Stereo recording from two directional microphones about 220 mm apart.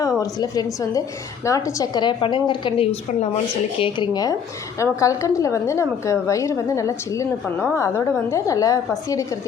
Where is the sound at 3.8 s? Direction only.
20° left (ahead or behind).